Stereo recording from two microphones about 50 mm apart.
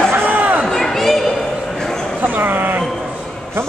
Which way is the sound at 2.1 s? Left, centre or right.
Right.